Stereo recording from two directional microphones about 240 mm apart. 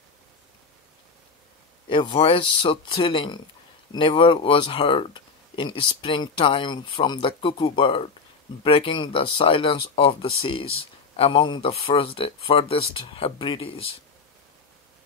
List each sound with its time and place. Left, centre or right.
1.9 s speech: left